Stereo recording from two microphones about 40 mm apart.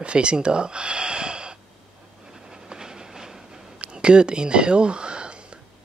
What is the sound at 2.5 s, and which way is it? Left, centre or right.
Train, centre.